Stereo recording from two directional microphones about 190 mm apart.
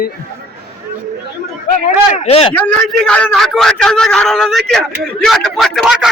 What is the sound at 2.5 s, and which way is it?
A man's voice, 5° left (ahead or behind).